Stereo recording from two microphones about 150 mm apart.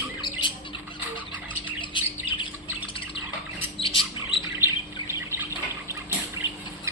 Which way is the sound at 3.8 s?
35° left (ahead or behind).